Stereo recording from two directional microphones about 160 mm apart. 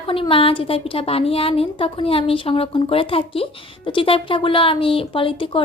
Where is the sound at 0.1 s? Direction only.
35° left (ahead or behind).